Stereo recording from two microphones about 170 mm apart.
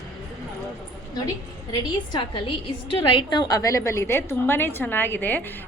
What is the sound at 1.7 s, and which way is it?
A woman's voice, 25° left (ahead or behind).